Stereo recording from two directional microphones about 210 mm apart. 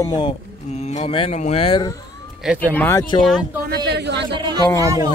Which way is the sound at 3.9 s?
55° right (ahead or behind).